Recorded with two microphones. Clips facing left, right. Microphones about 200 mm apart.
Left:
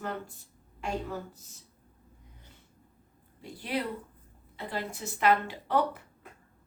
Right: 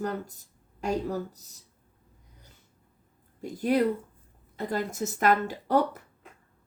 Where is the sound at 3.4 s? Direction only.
45° right (ahead or behind).